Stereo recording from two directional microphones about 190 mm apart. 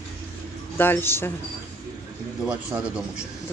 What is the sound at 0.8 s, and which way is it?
Speech, 10° left (ahead or behind).